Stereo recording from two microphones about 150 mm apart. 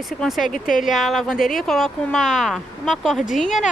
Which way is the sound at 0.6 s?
65° left (ahead or behind).